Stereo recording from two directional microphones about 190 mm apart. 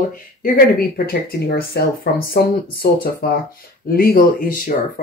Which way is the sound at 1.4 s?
55° left (ahead or behind).